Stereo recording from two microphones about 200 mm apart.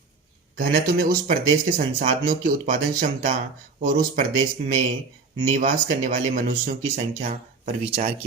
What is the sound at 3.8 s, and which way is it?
Speech, 45° right (ahead or behind).